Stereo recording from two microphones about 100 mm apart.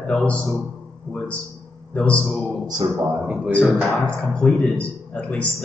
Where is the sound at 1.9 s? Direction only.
10° left (ahead or behind).